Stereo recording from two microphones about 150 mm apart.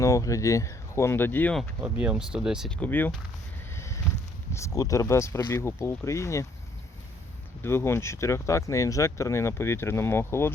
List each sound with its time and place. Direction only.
0.0 s speech: 20° left (ahead or behind)
1.8 s speech: 10° right (ahead or behind)
2.8 s speech: 15° left (ahead or behind)
3.7 s a sound: 20° left (ahead or behind)
4.5 s speech: 20° left (ahead or behind)
7.6 s speech: 15° left (ahead or behind)